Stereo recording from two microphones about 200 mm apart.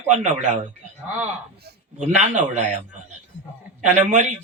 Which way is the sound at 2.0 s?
35° right (ahead or behind).